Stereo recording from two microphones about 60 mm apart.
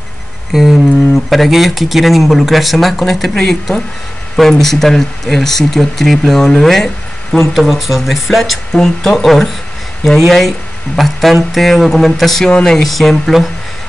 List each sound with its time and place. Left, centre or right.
0.5 s a sound: centre
1.1 s speech: centre
7.5 s speech: centre
8.7 s speech: centre